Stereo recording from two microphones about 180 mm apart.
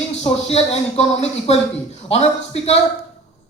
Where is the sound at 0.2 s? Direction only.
35° left (ahead or behind).